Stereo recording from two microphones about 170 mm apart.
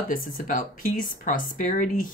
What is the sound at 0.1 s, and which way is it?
Speech, 50° left (ahead or behind).